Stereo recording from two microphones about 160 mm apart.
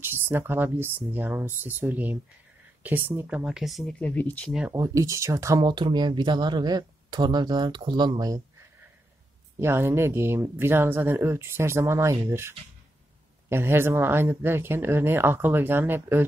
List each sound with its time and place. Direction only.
0.0 s speech: 15° right (ahead or behind); by 4.5 s 10° left (ahead or behind)
4.5 s speech: 5° right (ahead or behind)
4.7 s speech: 20° right (ahead or behind)
9.6 s speech: 15° right (ahead or behind)